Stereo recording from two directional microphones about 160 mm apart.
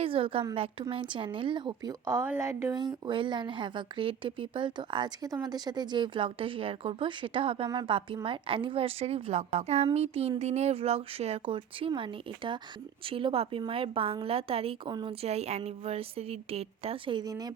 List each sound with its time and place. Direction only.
0.0 s a woman's voice: 35° right (ahead or behind)